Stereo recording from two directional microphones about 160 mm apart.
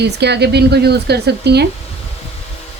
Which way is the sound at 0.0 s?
90° right.